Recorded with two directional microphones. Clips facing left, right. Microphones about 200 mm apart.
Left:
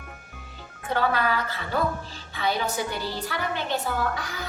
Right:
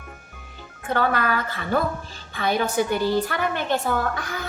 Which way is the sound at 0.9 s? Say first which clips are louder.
Right 2 dB; 50° right (ahead or behind).